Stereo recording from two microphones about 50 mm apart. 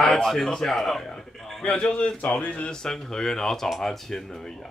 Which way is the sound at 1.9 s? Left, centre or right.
Left.